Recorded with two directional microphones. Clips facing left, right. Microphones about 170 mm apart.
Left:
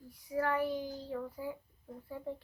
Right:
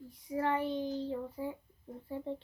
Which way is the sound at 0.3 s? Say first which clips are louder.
Even; 25° right (ahead or behind).